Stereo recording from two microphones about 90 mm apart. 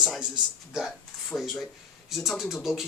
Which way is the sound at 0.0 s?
5° right (ahead or behind).